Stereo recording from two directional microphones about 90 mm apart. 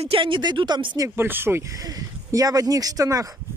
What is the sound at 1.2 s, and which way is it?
Speech, 25° right (ahead or behind).